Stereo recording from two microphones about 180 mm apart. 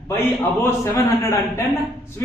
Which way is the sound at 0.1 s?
15° left (ahead or behind).